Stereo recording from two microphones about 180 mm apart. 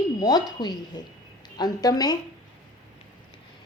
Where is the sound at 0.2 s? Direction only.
20° left (ahead or behind).